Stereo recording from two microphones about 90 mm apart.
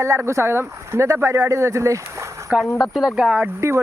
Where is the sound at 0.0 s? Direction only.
30° right (ahead or behind).